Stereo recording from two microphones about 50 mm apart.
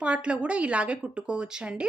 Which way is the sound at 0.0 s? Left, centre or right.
Right.